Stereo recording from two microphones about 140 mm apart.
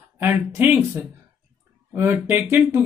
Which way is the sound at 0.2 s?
15° right (ahead or behind).